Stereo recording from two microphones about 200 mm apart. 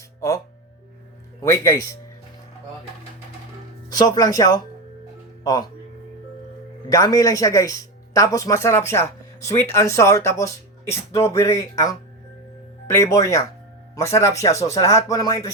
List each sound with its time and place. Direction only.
1.4 s speech: 15° left (ahead or behind)
3.8 s speech: 20° left (ahead or behind)
6.9 s speech: 15° left (ahead or behind)